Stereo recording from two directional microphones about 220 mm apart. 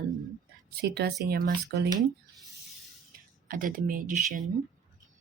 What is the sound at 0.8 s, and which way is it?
Speech, 50° right (ahead or behind).